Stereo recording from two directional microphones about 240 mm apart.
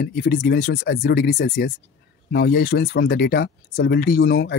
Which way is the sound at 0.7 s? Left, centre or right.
Left.